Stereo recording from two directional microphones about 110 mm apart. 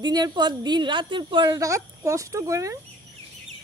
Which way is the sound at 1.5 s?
30° right (ahead or behind).